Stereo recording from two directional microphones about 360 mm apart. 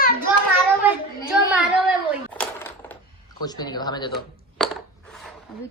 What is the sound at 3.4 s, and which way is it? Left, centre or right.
Speech, centre.